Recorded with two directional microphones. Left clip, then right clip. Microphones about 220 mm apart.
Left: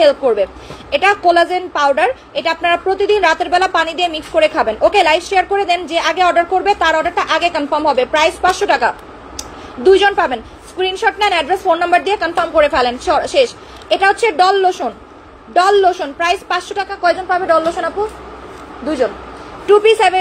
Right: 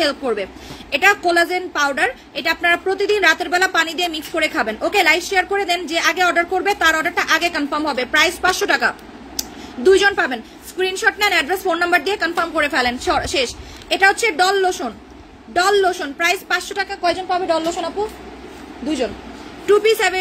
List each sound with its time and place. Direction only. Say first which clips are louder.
0.0 s a woman's voice: left 8 dB; 30° right (ahead or behind)
19.6 s a woman's voice: left 5 dB; 25° right (ahead or behind)